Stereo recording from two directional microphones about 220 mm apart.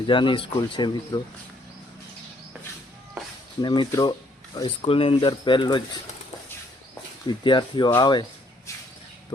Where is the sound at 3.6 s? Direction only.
20° left (ahead or behind).